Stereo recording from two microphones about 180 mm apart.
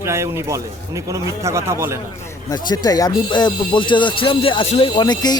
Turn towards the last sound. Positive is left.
turn(degrees=25)  # may be behind; listen again after turning